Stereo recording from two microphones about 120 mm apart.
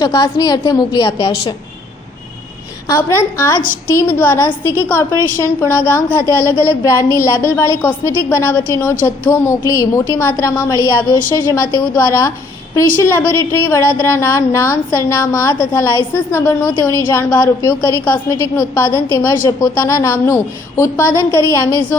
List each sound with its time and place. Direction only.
0.0 s a woman's voice: 35° left (ahead or behind)
2.8 s a woman's voice: 25° left (ahead or behind)
18.3 s a woman's voice: 15° left (ahead or behind)